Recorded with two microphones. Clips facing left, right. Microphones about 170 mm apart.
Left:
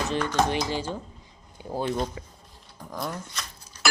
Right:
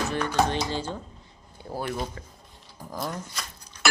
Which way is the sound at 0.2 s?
10° right (ahead or behind).